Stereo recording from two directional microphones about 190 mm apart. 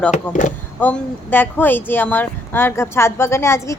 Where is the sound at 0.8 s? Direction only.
10° left (ahead or behind).